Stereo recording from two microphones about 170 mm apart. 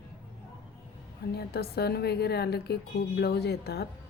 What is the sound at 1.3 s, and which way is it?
A woman's voice, 65° left (ahead or behind).